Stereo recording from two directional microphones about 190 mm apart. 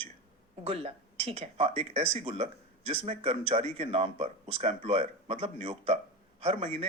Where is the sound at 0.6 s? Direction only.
30° right (ahead or behind).